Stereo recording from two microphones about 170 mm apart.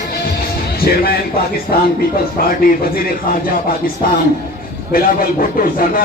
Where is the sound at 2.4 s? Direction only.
60° left (ahead or behind).